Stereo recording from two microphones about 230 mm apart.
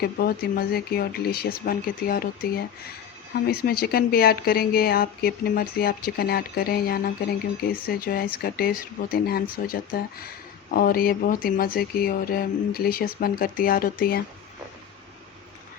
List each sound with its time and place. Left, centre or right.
0.0 s speech: left